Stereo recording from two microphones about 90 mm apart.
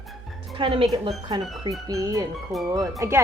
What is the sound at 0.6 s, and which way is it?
Speech, 90° right.